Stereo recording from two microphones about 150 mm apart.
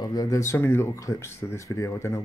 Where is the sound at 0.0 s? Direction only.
25° left (ahead or behind).